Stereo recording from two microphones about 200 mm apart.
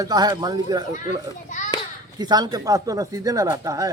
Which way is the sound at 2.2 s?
20° right (ahead or behind).